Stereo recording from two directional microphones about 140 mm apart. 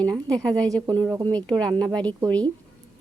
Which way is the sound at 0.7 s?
25° right (ahead or behind).